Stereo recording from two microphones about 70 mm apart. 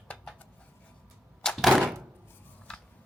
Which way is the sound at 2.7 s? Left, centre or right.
Centre.